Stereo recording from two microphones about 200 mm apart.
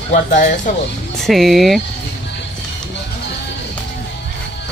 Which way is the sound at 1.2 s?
Centre (ahead or behind).